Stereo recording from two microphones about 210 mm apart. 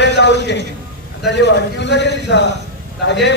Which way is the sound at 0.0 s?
55° left (ahead or behind).